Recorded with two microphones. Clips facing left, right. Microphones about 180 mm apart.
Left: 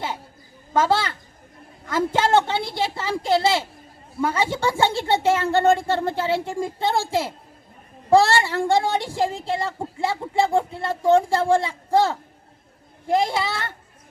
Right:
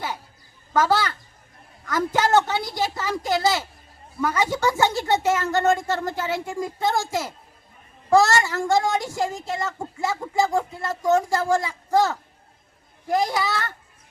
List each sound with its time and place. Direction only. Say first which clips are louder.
0.7 s speech: even; 25° left (ahead or behind)